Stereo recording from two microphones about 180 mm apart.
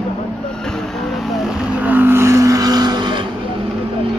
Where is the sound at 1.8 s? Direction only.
10° right (ahead or behind).